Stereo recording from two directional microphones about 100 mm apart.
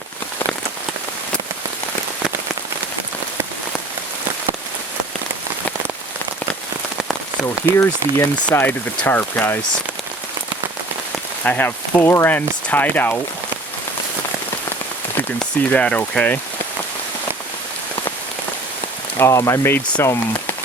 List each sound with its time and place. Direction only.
7.4 s speech: 30° left (ahead or behind)
11.4 s speech: 15° left (ahead or behind)
15.4 s speech: 10° left (ahead or behind)
19.2 s speech: 30° left (ahead or behind)